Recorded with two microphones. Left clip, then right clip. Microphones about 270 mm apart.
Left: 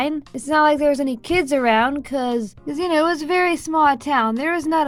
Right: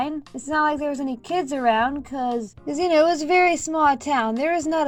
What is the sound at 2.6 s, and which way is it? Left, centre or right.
Speech, left.